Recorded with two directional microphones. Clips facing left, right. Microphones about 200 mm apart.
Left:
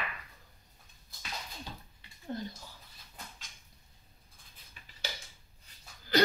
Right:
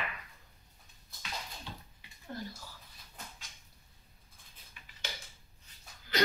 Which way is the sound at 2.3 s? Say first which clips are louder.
Left 3 dB; 20° left (ahead or behind).